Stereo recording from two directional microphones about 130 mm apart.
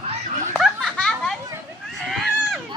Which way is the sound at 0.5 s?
5° left (ahead or behind).